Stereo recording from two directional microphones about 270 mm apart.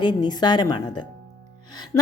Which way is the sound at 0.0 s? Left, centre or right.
Centre.